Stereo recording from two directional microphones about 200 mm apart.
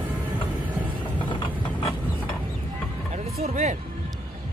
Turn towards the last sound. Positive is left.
turn(degrees=-35)  # may be behind; listen again after turning